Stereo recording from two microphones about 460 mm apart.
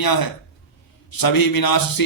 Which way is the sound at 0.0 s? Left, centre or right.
Left.